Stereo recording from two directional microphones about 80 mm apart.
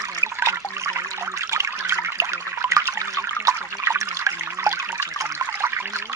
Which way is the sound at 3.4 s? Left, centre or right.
Right.